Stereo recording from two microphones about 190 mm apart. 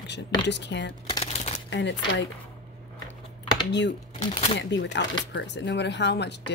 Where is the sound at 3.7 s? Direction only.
65° left (ahead or behind).